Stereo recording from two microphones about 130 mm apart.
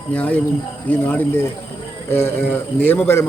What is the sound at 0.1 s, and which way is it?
A man's voice, 10° left (ahead or behind).